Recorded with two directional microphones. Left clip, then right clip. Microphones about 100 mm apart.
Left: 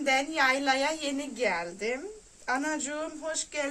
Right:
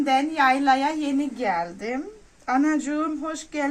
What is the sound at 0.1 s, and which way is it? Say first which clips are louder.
A woman's voice: right 5 dB; 60° left (ahead or behind).